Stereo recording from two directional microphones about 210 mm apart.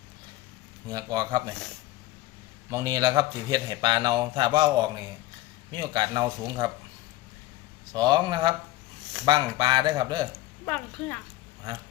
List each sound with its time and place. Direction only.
0.9 s a man's voice: 20° right (ahead or behind)
2.6 s a man's voice: 15° right (ahead or behind)
7.9 s a man's voice: 20° right (ahead or behind)
10.7 s speech: 10° left (ahead or behind)